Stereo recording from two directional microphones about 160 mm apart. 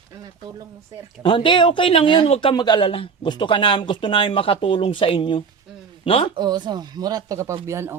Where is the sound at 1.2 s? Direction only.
30° left (ahead or behind).